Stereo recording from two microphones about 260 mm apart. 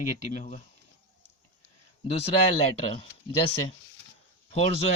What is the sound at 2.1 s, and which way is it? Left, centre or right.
Speech, left.